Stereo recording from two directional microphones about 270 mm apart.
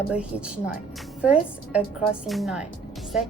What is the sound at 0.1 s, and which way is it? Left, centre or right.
A woman's voice, centre.